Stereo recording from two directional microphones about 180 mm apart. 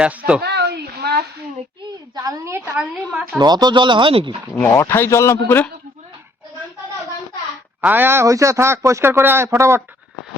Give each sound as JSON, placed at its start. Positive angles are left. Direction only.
{"t": 0.0, "sound": "speech", "side_deg": -5}
{"t": 0.4, "sound": "a sound", "side_deg": -65}
{"t": 2.1, "sound": "a man's voice", "side_deg": -20}
{"t": 3.3, "sound": "speech", "side_deg": -25}
{"t": 4.7, "sound": "a man's voice", "side_deg": 15}
{"t": 7.8, "sound": "a man's voice", "side_deg": -10}